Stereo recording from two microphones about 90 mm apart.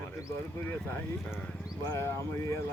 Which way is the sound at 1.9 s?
30° left (ahead or behind).